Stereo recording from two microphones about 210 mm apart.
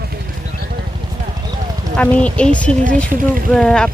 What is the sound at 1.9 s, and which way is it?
Speech, 5° left (ahead or behind).